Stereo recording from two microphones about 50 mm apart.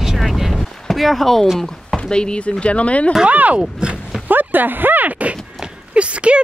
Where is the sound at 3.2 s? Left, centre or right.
Right.